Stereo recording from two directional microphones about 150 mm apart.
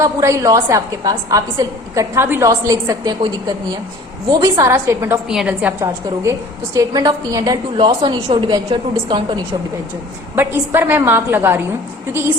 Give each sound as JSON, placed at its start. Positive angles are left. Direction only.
{"t": 0.0, "sound": "a woman's voice", "side_deg": -20}
{"t": 5.3, "sound": "a woman's voice", "side_deg": -5}
{"t": 6.7, "sound": "a woman's voice", "side_deg": -25}
{"t": 10.3, "sound": "a woman's voice", "side_deg": -15}